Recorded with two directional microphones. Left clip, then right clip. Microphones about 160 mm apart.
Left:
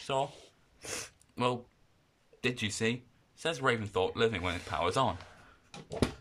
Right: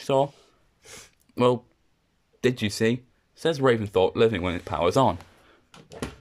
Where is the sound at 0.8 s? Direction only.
60° left (ahead or behind).